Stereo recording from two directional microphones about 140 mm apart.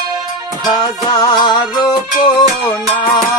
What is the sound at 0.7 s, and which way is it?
Music, 30° left (ahead or behind).